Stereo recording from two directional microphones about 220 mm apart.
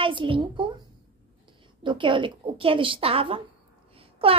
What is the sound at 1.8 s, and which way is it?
A woman's voice, 20° right (ahead or behind).